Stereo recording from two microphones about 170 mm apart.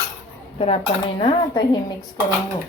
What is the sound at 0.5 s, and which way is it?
A woman's voice, 35° left (ahead or behind).